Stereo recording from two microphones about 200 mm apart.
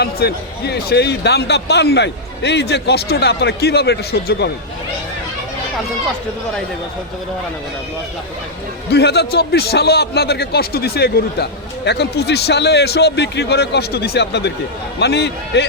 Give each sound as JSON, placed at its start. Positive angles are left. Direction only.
{"t": 0.0, "sound": "speech", "side_deg": 55}
{"t": 8.9, "sound": "a man's voice", "side_deg": 55}